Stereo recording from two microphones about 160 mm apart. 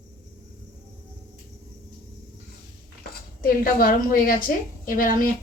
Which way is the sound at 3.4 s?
65° left (ahead or behind).